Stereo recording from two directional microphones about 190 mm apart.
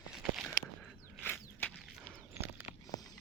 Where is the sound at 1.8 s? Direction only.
5° right (ahead or behind).